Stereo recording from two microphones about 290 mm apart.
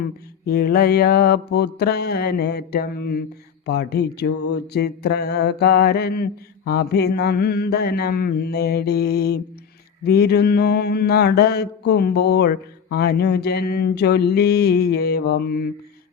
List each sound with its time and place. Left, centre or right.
0.4 s mantra: left